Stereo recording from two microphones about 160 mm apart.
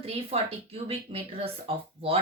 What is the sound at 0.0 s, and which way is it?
A woman's voice, 40° right (ahead or behind).